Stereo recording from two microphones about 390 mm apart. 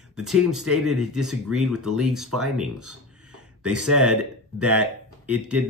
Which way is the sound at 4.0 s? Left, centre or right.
Centre.